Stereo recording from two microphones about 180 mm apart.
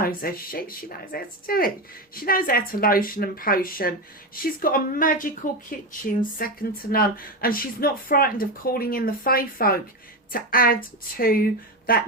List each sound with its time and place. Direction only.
0.0 s a woman's voice: 55° left (ahead or behind)